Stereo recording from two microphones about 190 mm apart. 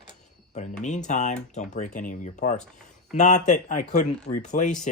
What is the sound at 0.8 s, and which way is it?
Speech, 40° left (ahead or behind).